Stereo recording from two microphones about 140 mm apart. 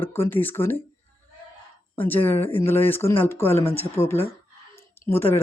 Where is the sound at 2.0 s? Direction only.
15° left (ahead or behind).